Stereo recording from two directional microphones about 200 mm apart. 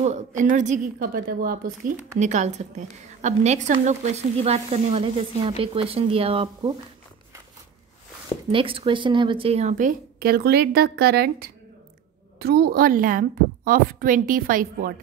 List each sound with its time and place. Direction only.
0.0 s a woman's voice: 35° right (ahead or behind)
8.5 s a woman's voice: 25° right (ahead or behind); by 15.0 s 45° right (ahead or behind)